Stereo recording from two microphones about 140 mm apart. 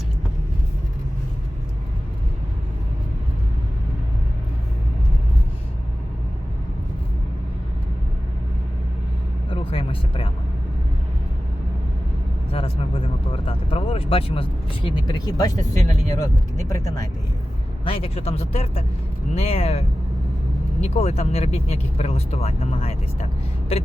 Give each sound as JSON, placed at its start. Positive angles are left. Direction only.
{"t": 9.5, "sound": "vehicle", "side_deg": 40}
{"t": 12.5, "sound": "vehicle", "side_deg": 40}
{"t": 14.8, "sound": "speech", "side_deg": 30}
{"t": 17.8, "sound": "speech", "side_deg": 45}
{"t": 20.8, "sound": "speech", "side_deg": 50}